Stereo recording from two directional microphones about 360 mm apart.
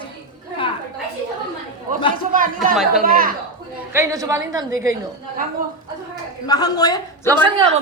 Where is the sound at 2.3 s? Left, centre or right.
Right.